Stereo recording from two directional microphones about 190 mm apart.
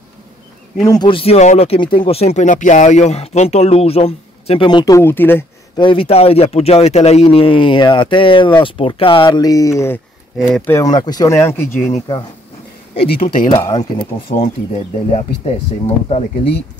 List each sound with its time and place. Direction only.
0.8 s speech: 20° left (ahead or behind)
5.8 s speech: 25° left (ahead or behind)
10.3 s speech: centre (ahead or behind)
10.7 s speech: 20° left (ahead or behind)
13.1 s speech: 45° left (ahead or behind)
13.5 s speech: 20° left (ahead or behind); by 15.5 s 35° left (ahead or behind)